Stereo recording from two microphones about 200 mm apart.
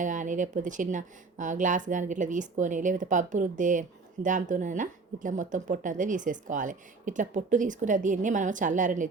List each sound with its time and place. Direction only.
0.0 s speech: 40° right (ahead or behind)